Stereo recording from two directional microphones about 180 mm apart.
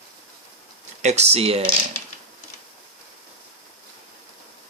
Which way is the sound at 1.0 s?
35° right (ahead or behind).